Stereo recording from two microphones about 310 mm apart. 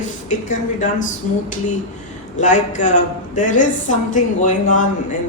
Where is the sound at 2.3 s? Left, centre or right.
Left.